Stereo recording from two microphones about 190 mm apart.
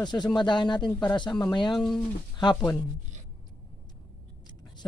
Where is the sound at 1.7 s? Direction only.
Centre (ahead or behind).